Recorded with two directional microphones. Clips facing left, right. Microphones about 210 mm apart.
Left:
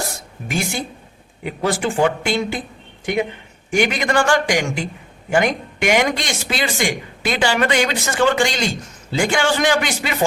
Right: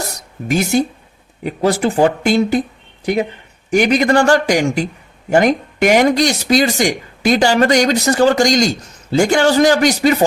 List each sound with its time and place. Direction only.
0.1 s a sound: 40° right (ahead or behind)
1.5 s speech: 40° right (ahead or behind)
3.7 s speech: 40° right (ahead or behind)